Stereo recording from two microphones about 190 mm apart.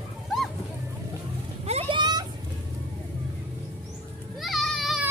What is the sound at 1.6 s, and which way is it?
Vehicle, 30° right (ahead or behind).